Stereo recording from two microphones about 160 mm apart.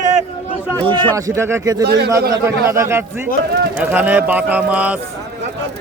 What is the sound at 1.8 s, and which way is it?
Speech, 90° right.